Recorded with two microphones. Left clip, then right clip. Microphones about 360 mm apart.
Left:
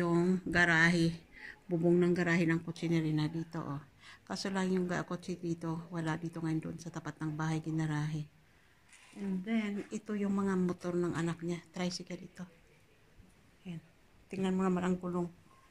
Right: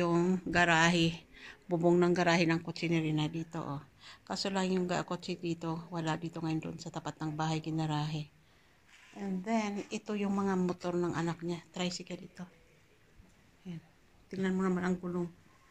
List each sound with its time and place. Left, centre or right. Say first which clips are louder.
0.0 s a sound: right 1 dB; centre
1.7 s speech: right 2 dB; right
2.1 s speech: right 3 dB; centre
9.5 s speech: right 4 dB; centre
13.7 s speech: even; centre